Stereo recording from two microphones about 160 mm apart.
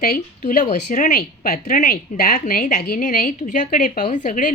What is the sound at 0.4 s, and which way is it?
A woman's voice, 55° left (ahead or behind).